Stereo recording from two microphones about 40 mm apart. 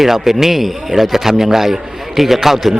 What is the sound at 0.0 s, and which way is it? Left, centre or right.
A man's voice, centre.